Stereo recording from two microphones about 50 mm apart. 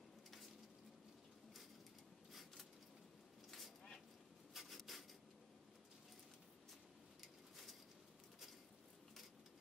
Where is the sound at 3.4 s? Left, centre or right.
Centre.